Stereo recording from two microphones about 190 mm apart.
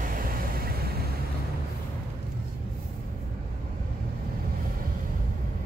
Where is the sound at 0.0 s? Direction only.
45° right (ahead or behind).